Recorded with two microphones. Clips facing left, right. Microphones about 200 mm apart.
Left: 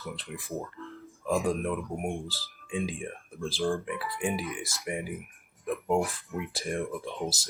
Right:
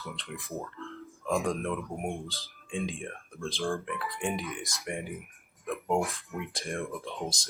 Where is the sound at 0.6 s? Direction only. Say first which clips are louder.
Even; 5° left (ahead or behind).